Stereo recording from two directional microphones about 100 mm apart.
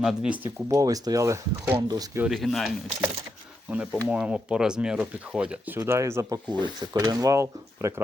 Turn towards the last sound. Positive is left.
turn(degrees=-25)  # may be behind; listen again after turning